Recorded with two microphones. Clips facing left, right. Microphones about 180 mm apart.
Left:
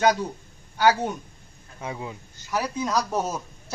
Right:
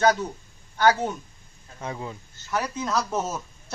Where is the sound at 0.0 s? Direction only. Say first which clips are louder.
Even; 10° left (ahead or behind).